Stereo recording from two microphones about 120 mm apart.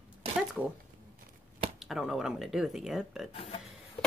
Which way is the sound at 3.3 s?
55° left (ahead or behind).